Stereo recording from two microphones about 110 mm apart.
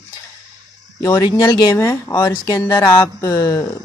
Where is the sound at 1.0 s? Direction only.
30° left (ahead or behind).